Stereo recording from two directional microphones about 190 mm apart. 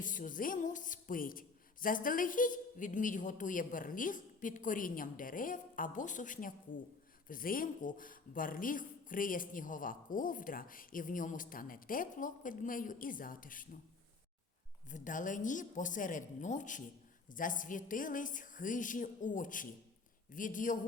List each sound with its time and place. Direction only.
0.0 s a man's voice: 45° left (ahead or behind)
14.8 s a man's voice: 40° left (ahead or behind)